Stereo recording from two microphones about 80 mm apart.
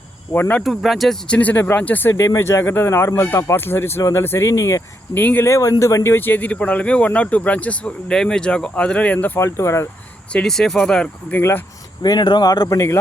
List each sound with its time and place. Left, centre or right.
0.3 s speech: left
0.6 s speech: centre
1.3 s speech: centre
2.2 s speech: left
5.1 s speech: left
5.5 s speech: left
9.4 s speech: left
10.3 s speech: centre
11.3 s speech: left
12.0 s speech: left
12.6 s speech: left